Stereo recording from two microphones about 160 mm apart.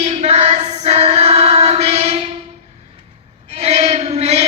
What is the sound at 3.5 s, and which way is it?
Chant, 40° right (ahead or behind).